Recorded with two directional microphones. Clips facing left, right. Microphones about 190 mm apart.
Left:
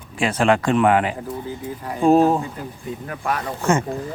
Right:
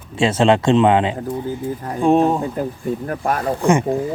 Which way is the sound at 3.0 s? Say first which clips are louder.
Right 1 dB; 40° right (ahead or behind).